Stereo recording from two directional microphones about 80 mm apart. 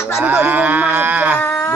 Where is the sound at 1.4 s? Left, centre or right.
Left.